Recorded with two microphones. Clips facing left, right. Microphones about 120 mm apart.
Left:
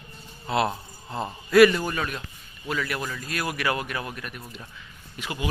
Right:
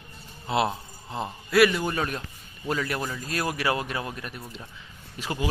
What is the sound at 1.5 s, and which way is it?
Speech, 5° right (ahead or behind).